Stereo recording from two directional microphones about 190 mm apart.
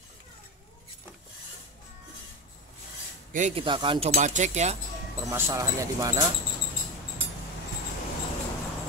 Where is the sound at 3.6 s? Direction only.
25° right (ahead or behind).